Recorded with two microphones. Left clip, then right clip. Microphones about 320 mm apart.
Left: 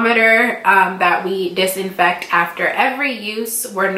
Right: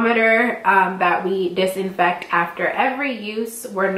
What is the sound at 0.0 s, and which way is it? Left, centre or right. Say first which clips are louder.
A woman's voice: left 3 dB; centre.